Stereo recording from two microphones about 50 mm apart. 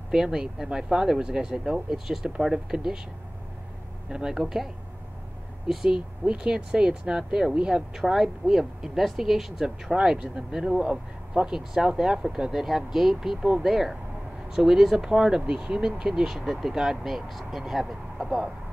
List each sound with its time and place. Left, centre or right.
0.1 s speech: centre
4.1 s speech: centre
5.7 s speech: centre
9.9 s speech: right